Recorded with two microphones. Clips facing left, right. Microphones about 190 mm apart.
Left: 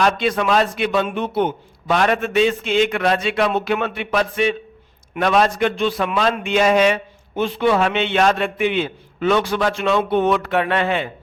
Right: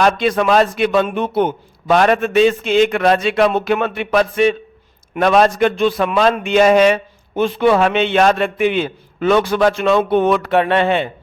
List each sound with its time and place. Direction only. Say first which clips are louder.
0.0 s a man's voice: right 4 dB; 45° right (ahead or behind)
10.5 s speech: right 5 dB; 25° right (ahead or behind)